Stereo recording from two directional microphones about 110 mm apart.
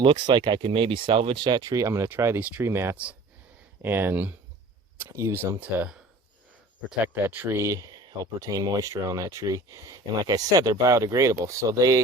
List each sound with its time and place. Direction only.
0.0 s speech: 45° right (ahead or behind); by 2.9 s 20° right (ahead or behind)
2.9 s speech: 10° right (ahead or behind)
7.0 s speech: 15° right (ahead or behind); by 12.0 s 35° right (ahead or behind)